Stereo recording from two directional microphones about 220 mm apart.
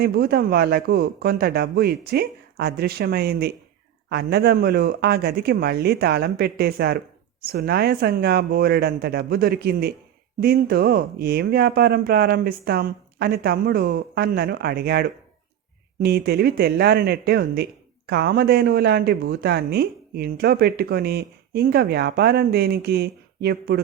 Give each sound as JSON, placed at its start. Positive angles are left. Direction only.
{"t": 0.0, "sound": "speech", "side_deg": -45}